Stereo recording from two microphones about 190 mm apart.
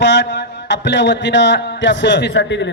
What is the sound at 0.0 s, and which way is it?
Speech, 70° left (ahead or behind).